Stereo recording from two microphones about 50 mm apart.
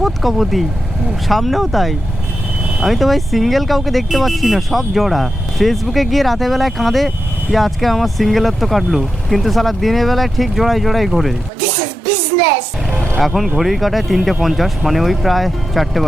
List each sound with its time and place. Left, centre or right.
0.0 s speech: centre
13.1 s speech: centre